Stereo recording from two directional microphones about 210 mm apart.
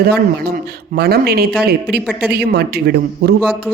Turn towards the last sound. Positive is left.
turn(degrees=-50)  # may be behind; listen again after turning